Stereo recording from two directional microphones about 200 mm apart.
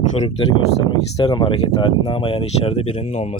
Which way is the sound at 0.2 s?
25° left (ahead or behind).